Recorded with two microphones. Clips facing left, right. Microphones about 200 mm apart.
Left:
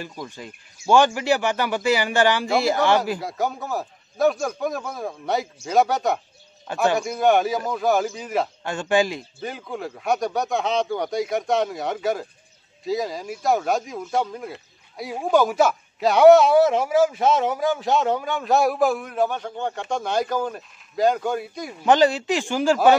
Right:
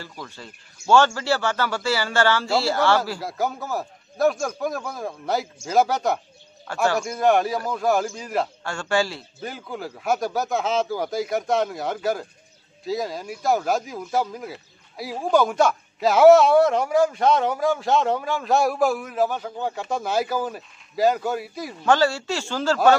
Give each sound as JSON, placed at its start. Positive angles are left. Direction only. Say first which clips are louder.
{"t": 0.0, "sound": "speech", "louder": "left 4 dB", "side_deg": 15}
{"t": 3.2, "sound": "a man's voice", "louder": "even", "side_deg": 0}
{"t": 6.7, "sound": "a man's voice", "louder": "left 1 dB", "side_deg": 20}
{"t": 7.0, "sound": "a man's voice", "louder": "even", "side_deg": 0}
{"t": 8.6, "sound": "speech", "louder": "left 3 dB", "side_deg": 20}
{"t": 9.4, "sound": "a man's voice", "louder": "even", "side_deg": 0}
{"t": 21.8, "sound": "speech", "louder": "left 3 dB", "side_deg": 20}